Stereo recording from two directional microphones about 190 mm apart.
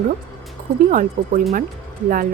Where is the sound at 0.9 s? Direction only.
45° right (ahead or behind).